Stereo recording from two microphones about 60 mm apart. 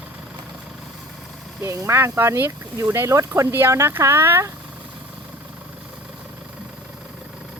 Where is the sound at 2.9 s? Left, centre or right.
Right.